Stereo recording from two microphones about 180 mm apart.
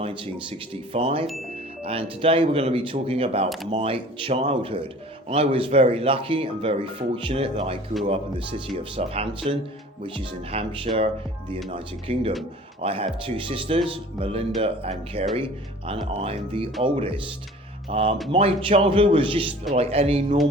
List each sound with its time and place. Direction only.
0.0 s speech: 30° right (ahead or behind)